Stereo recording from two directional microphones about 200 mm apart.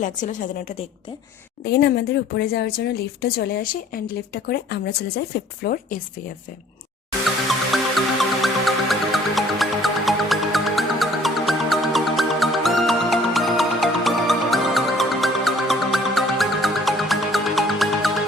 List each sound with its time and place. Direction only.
0.0 s a woman's voice: 40° left (ahead or behind)
1.6 s speech: 55° left (ahead or behind)
7.7 s music: centre (ahead or behind)